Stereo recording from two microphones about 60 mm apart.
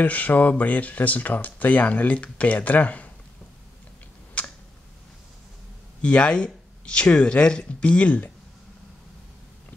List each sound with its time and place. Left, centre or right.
0.0 s speech: left
4.4 s computer keyboard: left
6.0 s speech: centre